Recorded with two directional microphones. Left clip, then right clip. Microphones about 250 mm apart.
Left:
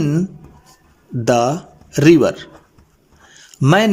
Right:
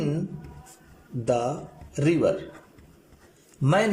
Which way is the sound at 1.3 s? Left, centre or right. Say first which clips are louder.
Left 10 dB; left.